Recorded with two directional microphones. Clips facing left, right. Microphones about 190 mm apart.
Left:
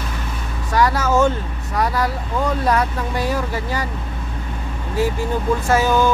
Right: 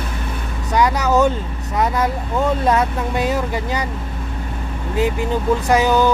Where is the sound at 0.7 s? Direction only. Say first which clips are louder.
Right 1 dB; 20° right (ahead or behind).